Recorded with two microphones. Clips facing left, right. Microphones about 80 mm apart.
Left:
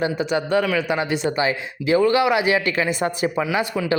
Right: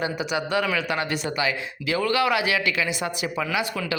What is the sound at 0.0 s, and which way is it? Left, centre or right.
Speech, left.